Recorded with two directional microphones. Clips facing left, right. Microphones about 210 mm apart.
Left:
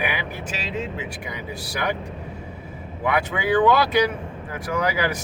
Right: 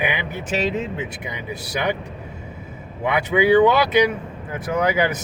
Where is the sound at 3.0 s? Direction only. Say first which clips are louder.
Right 5 dB; 20° right (ahead or behind).